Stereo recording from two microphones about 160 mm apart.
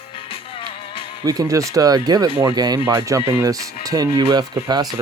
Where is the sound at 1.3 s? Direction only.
20° right (ahead or behind).